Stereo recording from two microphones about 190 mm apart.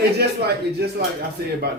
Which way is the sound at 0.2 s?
60° right (ahead or behind).